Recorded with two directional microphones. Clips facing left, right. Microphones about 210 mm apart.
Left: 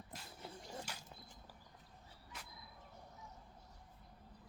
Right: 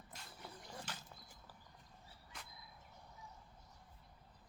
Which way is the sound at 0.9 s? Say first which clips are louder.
Even; 10° left (ahead or behind).